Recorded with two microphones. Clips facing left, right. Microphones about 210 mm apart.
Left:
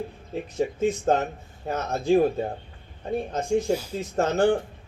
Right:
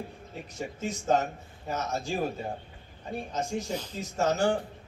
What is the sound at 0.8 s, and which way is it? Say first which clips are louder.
A man's voice: left 3 dB; 55° left (ahead or behind).